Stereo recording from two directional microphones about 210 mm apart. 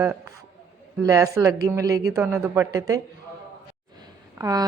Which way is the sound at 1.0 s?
15° right (ahead or behind).